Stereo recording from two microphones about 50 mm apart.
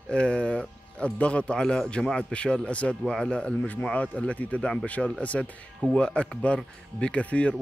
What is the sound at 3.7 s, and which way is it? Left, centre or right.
Speech, left.